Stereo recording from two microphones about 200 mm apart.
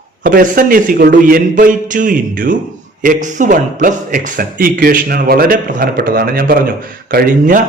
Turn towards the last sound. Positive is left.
turn(degrees=-45)  # may be behind; listen again after turning